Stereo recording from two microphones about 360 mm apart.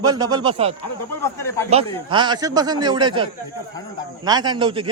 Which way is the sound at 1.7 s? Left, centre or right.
Centre.